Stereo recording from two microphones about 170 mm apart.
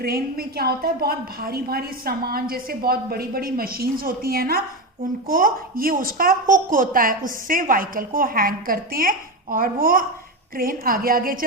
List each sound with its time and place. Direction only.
0.0 s a woman's voice: 65° right (ahead or behind)